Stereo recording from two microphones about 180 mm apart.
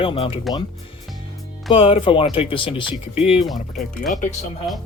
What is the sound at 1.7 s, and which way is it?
Speech, 30° left (ahead or behind).